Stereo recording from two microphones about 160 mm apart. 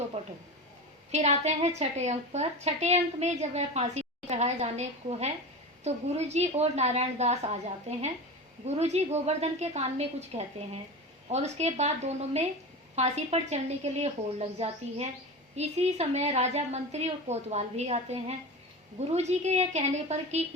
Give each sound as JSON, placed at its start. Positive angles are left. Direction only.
{"t": 0.2, "sound": "a woman's voice", "side_deg": -40}